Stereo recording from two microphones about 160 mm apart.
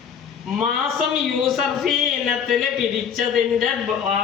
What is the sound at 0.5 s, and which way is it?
Speech, centre (ahead or behind).